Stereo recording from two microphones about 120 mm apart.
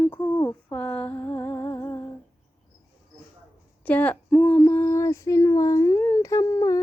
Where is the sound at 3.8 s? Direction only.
15° left (ahead or behind).